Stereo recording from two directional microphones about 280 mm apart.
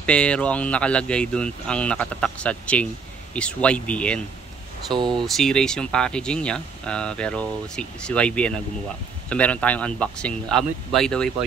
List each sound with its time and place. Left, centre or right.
0.0 s speech: centre
4.9 s speech: centre
5.2 s speech: centre